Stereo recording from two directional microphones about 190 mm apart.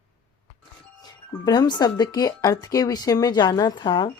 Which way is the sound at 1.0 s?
20° left (ahead or behind).